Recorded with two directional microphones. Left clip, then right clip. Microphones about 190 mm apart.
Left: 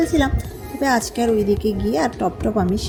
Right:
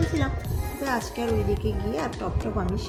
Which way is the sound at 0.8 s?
40° left (ahead or behind).